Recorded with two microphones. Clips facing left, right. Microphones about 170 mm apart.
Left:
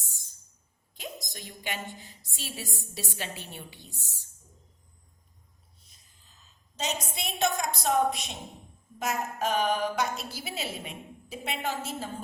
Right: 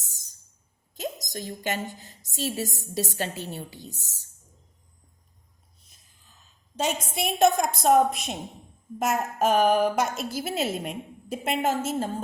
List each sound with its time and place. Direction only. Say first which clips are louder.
0.0 s music: even; 40° right (ahead or behind)
0.9 s a woman's voice: right 8 dB; 40° right (ahead or behind)
6.7 s a woman's voice: right 6 dB; 50° right (ahead or behind)